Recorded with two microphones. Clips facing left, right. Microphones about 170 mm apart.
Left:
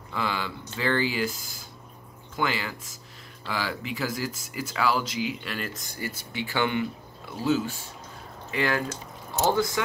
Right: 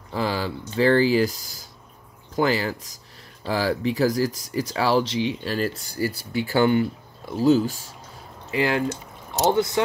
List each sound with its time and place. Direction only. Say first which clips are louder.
0.1 s speech: right 5 dB; 35° right (ahead or behind)
8.5 s speech: right 4 dB; 25° right (ahead or behind)